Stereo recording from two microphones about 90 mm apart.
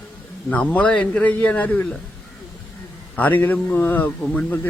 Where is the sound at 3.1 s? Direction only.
20° left (ahead or behind).